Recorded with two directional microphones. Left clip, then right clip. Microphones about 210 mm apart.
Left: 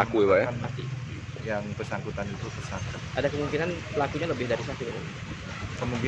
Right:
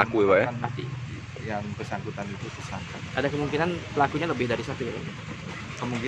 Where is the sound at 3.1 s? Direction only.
55° right (ahead or behind).